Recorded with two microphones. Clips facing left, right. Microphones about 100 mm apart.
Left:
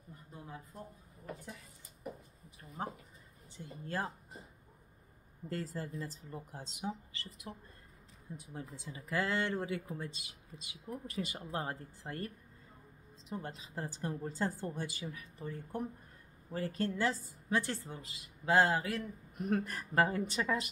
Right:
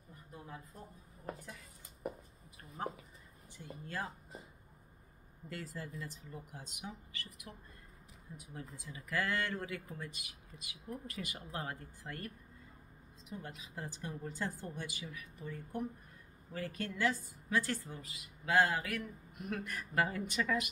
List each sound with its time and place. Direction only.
3.5 s a woman's voice: 30° left (ahead or behind)
5.5 s a woman's voice: 40° left (ahead or behind)
13.3 s a woman's voice: 30° left (ahead or behind)